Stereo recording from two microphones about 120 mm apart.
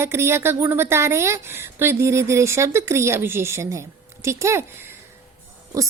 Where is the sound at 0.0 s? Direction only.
20° right (ahead or behind).